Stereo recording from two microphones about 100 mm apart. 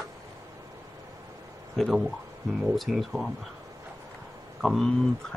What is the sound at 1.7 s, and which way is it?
Speech, centre (ahead or behind).